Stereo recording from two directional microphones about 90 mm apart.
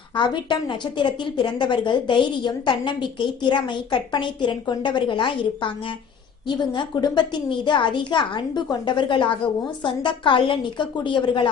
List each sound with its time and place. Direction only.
0.2 s a woman's voice: 60° left (ahead or behind)
6.6 s a woman's voice: 55° left (ahead or behind)